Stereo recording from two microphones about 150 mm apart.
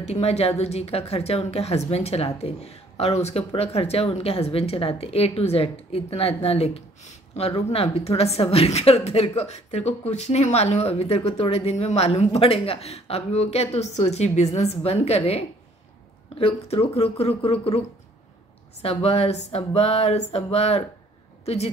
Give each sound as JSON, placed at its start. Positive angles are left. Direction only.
{"t": 0.0, "sound": "a woman's voice", "side_deg": 45}